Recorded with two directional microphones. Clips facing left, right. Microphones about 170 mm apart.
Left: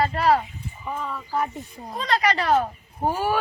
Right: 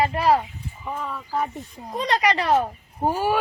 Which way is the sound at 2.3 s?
20° right (ahead or behind).